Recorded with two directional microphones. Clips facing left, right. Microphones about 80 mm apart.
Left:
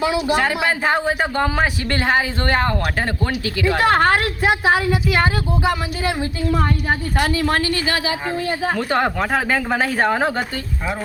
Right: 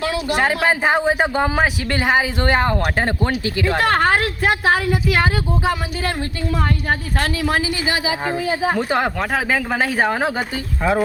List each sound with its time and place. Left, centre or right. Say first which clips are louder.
0.3 s speech: right 1 dB; centre
3.7 s speech: left 1 dB; centre